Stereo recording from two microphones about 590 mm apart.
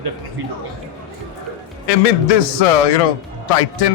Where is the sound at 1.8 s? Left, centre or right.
Left.